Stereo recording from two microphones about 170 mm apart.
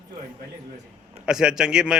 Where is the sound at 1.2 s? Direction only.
5° right (ahead or behind).